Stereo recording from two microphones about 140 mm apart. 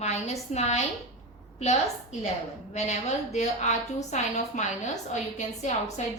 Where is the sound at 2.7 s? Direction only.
55° left (ahead or behind).